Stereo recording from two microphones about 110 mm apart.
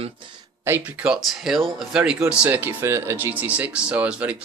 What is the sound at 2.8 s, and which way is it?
Speech, 25° right (ahead or behind).